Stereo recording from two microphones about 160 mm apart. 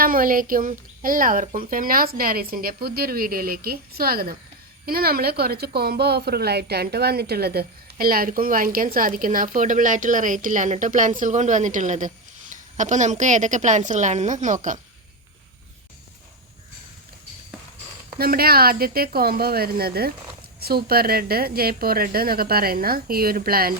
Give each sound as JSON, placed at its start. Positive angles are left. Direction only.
{"t": 0.0, "sound": "a woman's voice", "side_deg": -60}
{"t": 18.2, "sound": "a woman's voice", "side_deg": -70}